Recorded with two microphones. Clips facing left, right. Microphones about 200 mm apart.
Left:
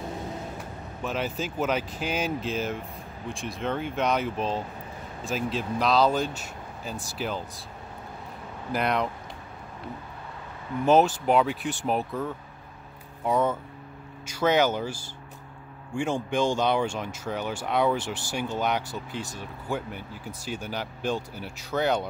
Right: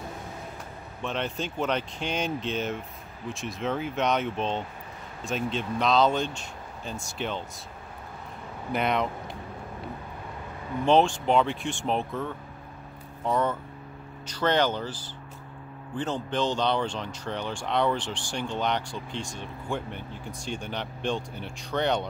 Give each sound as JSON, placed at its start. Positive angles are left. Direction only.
{"t": 1.0, "sound": "speech", "side_deg": 5}
{"t": 8.7, "sound": "speech", "side_deg": 0}
{"t": 10.9, "sound": "speech", "side_deg": 5}